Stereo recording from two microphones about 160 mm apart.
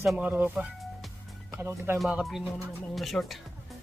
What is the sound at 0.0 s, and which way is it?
Music, 5° right (ahead or behind).